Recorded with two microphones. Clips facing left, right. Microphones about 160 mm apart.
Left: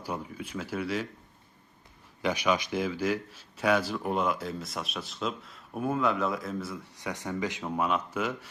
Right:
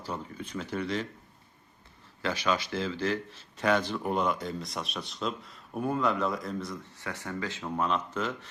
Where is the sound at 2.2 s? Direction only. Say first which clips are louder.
Left 2 dB; 15° left (ahead or behind).